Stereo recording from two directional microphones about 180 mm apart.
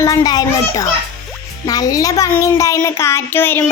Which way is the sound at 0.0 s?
20° left (ahead or behind).